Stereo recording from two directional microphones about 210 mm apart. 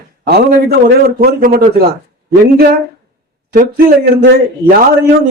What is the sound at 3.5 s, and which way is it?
Speech, 40° right (ahead or behind).